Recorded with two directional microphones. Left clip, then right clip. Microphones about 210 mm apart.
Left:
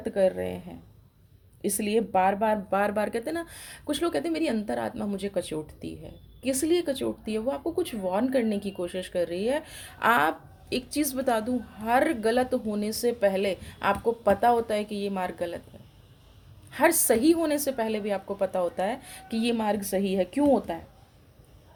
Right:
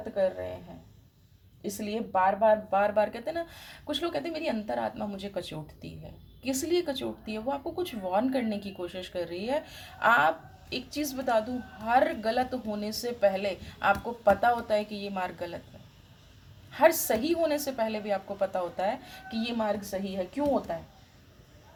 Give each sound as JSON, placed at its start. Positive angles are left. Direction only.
{"t": 0.1, "sound": "speech", "side_deg": 40}
{"t": 1.6, "sound": "speech", "side_deg": 40}
{"t": 16.7, "sound": "speech", "side_deg": 30}